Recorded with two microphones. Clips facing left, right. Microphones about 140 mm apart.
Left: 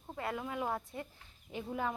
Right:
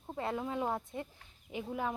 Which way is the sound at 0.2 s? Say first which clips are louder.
Right 2 dB; 25° right (ahead or behind).